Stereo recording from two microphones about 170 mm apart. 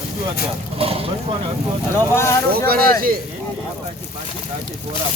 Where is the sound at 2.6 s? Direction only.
60° right (ahead or behind).